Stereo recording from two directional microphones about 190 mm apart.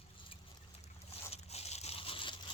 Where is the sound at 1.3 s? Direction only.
35° left (ahead or behind).